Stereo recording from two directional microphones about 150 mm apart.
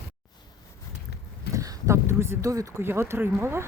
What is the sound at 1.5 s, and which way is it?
Speech, 20° right (ahead or behind).